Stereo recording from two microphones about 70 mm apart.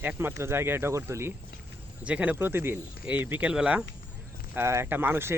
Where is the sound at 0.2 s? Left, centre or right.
Right.